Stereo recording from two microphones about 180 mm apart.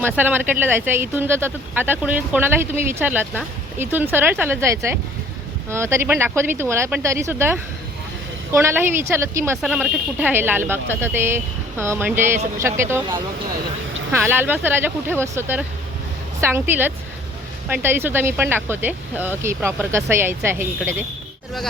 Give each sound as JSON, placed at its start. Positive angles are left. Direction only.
{"t": 0.0, "sound": "speech", "side_deg": -10}
{"t": 9.6, "sound": "speech", "side_deg": 0}
{"t": 10.2, "sound": "speech", "side_deg": -10}